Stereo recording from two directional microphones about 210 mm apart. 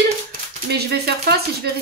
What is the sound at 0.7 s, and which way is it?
Speech, 50° right (ahead or behind).